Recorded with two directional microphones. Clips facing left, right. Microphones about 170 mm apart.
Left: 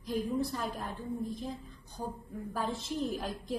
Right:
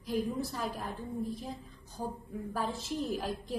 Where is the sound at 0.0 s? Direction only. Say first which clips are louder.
Left 1 dB; 5° right (ahead or behind).